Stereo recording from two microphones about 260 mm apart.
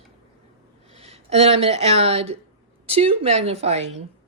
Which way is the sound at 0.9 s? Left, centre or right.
Right.